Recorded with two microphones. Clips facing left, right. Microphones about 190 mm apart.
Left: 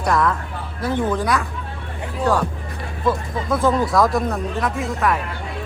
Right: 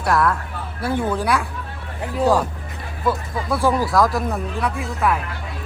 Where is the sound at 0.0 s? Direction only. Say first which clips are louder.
Even; 5° right (ahead or behind).